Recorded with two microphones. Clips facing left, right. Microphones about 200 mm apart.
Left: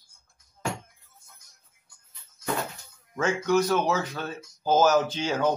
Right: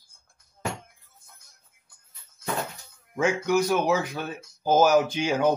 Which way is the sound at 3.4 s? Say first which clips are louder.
Left 1 dB; 10° right (ahead or behind).